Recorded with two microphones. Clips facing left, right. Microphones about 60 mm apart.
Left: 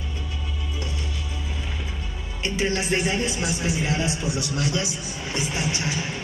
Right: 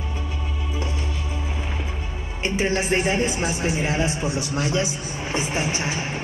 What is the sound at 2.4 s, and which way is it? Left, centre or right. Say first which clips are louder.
Speech: right 2 dB; right.